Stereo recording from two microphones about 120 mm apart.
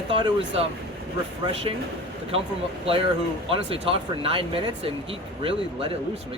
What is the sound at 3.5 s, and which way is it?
Speech, 50° right (ahead or behind).